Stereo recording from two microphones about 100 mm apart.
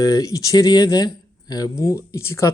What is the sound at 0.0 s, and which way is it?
Speech, 35° left (ahead or behind).